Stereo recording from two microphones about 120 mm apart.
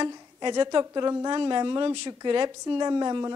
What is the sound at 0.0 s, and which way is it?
Speech, 40° right (ahead or behind).